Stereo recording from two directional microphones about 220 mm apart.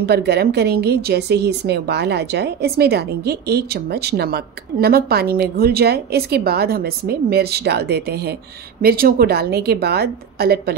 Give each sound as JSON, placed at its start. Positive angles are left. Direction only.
{"t": 0.0, "sound": "a woman's voice", "side_deg": -50}